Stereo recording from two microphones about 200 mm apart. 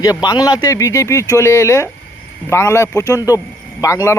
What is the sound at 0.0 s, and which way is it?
Speech, 15° left (ahead or behind).